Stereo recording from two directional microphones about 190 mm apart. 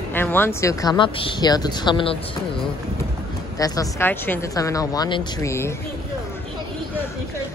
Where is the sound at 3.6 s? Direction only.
20° left (ahead or behind).